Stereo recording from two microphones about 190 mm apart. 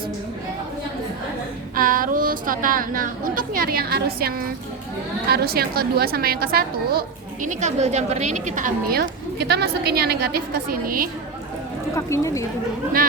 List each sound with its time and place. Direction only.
1.7 s a woman's voice: 50° right (ahead or behind)
7.4 s a woman's voice: 35° right (ahead or behind)
11.9 s speech: 15° left (ahead or behind)